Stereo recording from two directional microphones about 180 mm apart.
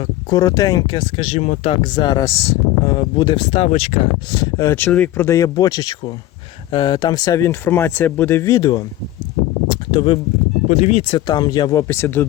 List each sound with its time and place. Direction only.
0.3 s speech: 20° left (ahead or behind)
4.4 s speech: 20° left (ahead or behind)
9.6 s a sound: 25° left (ahead or behind)
10.7 s speech: 35° left (ahead or behind)
11.3 s speech: 25° left (ahead or behind)